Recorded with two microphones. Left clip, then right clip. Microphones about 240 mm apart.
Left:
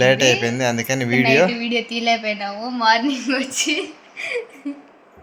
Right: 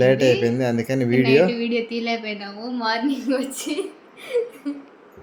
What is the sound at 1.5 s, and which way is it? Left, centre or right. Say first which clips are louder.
A woman's voice: left 1 dB; left.